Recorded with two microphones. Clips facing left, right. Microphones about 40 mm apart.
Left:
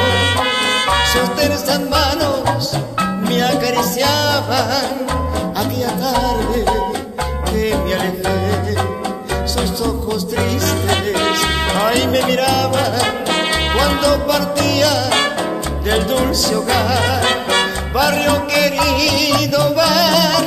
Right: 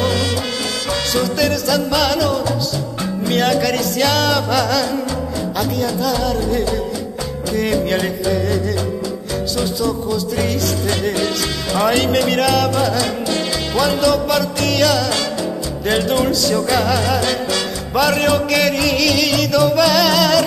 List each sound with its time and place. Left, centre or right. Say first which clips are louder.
0.0 s music: left 3 dB; left
1.2 s music: left 1 dB; centre
11.1 s music: left 4 dB; left
12.3 s music: even; centre
13.0 s music: left 3 dB; left
14.0 s music: left 1 dB; centre
16.3 s music: even; centre
17.2 s music: left 3 dB; left
17.9 s music: even; centre